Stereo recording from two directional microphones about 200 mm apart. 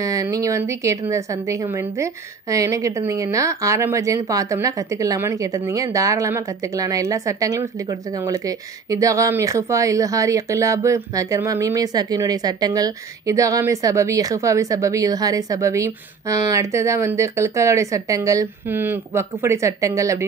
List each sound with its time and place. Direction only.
0.0 s speech: 15° right (ahead or behind)